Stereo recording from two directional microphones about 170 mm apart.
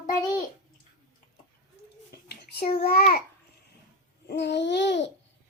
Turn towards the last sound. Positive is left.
turn(degrees=90)